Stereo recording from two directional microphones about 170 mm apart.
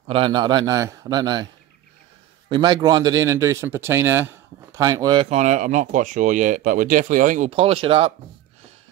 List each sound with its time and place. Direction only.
0.1 s a man's voice: 30° right (ahead or behind)
2.5 s a man's voice: 25° right (ahead or behind)
5.3 s speech: 45° right (ahead or behind)
7.5 s speech: 35° right (ahead or behind)